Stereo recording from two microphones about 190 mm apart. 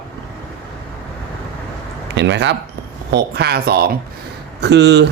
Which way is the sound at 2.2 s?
70° right (ahead or behind).